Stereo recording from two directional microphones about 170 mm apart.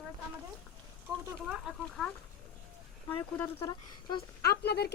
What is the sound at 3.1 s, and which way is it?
Speech, 15° left (ahead or behind).